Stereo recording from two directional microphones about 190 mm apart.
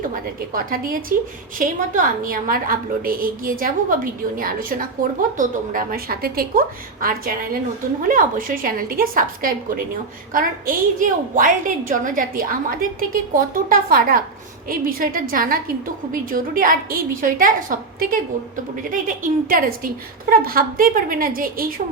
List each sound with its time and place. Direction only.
0.0 s a woman's voice: 45° right (ahead or behind)